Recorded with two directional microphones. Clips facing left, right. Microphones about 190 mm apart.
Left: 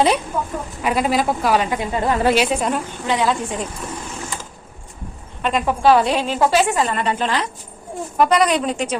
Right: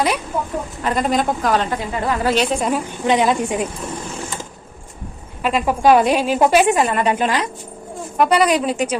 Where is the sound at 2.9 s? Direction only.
20° right (ahead or behind).